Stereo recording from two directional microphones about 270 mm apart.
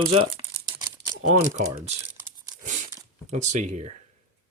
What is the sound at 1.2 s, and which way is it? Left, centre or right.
Speech, right.